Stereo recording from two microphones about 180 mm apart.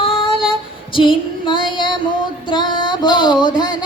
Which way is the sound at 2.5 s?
25° left (ahead or behind).